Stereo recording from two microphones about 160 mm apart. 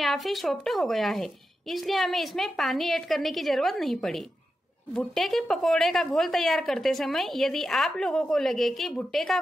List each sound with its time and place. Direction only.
0.0 s a woman's voice: centre (ahead or behind)